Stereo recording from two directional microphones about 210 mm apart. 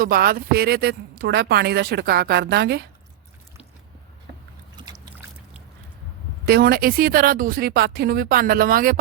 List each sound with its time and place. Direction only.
0.0 s speech: 45° right (ahead or behind)
6.4 s speech: 50° right (ahead or behind)